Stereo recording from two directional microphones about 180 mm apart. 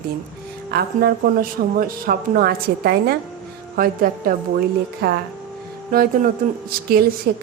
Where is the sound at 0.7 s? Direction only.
60° right (ahead or behind).